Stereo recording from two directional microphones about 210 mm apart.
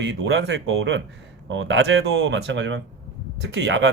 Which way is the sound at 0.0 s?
55° right (ahead or behind).